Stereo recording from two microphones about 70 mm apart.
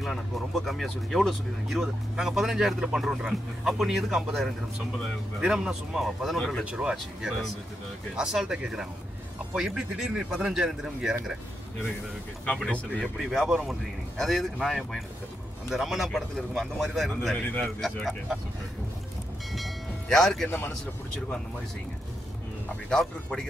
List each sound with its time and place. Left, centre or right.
0.0 s speech: centre
1.8 s speech: centre
6.6 s speech: centre
12.4 s speech: centre
13.0 s speech: centre
17.4 s speech: left
19.5 s train: centre
20.4 s speech: left
22.8 s speech: centre